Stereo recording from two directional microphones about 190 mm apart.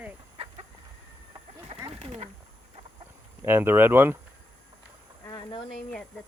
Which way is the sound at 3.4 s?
10° right (ahead or behind).